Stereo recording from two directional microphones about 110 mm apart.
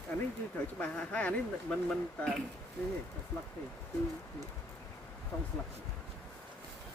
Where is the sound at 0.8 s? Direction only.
10° left (ahead or behind).